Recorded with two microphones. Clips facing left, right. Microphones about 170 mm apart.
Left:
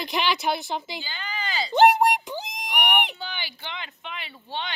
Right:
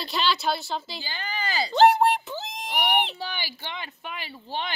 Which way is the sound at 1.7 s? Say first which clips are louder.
Left 1 dB; 15° left (ahead or behind).